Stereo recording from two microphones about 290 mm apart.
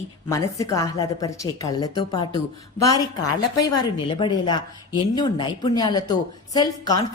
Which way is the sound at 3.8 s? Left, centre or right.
Centre.